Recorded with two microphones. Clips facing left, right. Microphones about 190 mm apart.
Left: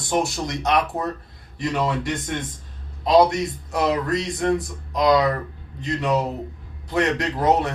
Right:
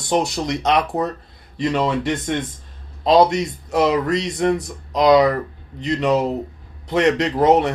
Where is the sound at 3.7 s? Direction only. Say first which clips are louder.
Right 5 dB; 80° right.